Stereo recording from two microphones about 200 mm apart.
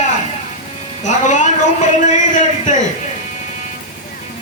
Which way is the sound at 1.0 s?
35° left (ahead or behind).